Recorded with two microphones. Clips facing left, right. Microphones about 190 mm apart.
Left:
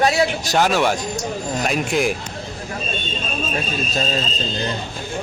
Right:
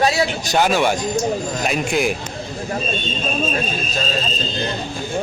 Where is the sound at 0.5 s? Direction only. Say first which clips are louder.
Right 2 dB; centre (ahead or behind).